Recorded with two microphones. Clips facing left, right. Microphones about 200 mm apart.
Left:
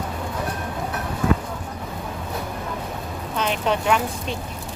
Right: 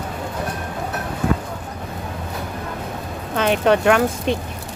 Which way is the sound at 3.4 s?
65° right (ahead or behind).